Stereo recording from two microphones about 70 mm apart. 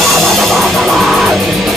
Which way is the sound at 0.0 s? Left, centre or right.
Centre.